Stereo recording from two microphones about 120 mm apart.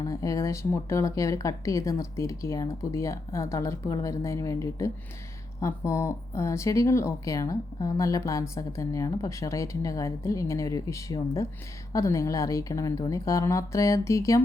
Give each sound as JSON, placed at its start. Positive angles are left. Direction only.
{"t": 0.0, "sound": "speech", "side_deg": 30}